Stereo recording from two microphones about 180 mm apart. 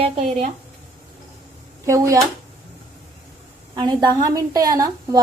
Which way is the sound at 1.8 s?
15° right (ahead or behind).